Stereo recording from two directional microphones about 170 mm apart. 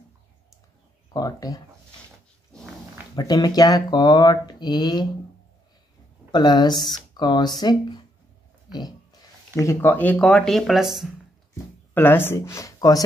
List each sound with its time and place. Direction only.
1.1 s speech: 20° left (ahead or behind)
3.2 s speech: 25° left (ahead or behind)
6.3 s speech: 25° left (ahead or behind)
9.6 s speech: 15° left (ahead or behind); by 11.1 s centre (ahead or behind)
11.5 s speech: 10° left (ahead or behind)